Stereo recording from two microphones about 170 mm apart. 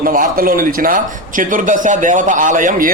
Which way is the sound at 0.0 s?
55° right (ahead or behind).